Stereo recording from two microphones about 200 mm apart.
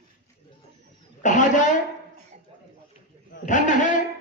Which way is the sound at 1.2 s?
40° left (ahead or behind).